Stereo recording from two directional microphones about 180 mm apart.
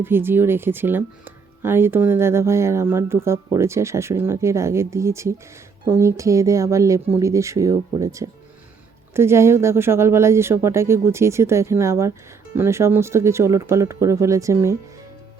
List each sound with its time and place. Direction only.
0.0 s speech: 10° right (ahead or behind)